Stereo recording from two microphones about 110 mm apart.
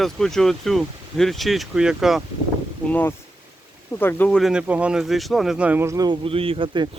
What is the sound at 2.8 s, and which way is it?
Speech, 15° left (ahead or behind).